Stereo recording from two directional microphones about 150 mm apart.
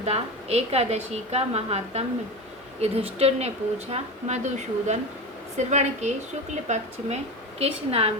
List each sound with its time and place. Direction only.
0.0 s a woman's voice: 45° right (ahead or behind)
7.6 s a woman's voice: 40° right (ahead or behind)